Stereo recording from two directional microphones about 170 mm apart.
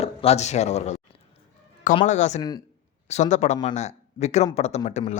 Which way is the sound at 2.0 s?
45° left (ahead or behind).